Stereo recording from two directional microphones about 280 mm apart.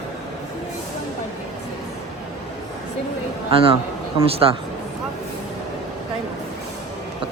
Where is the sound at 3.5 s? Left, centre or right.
Centre.